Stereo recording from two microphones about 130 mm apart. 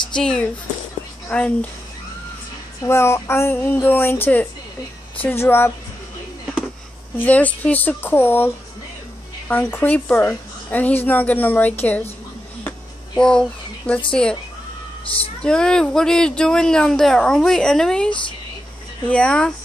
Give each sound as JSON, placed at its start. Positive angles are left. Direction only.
{"t": 0.1, "sound": "a woman's voice", "side_deg": 5}
{"t": 2.8, "sound": "a woman's voice", "side_deg": 20}
{"t": 7.2, "sound": "a woman's voice", "side_deg": 10}
{"t": 9.5, "sound": "a woman's voice", "side_deg": 15}
{"t": 13.2, "sound": "speech", "side_deg": 5}
{"t": 15.4, "sound": "a woman's voice", "side_deg": 5}